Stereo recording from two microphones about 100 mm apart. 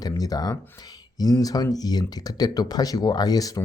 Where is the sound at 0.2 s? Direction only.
40° left (ahead or behind).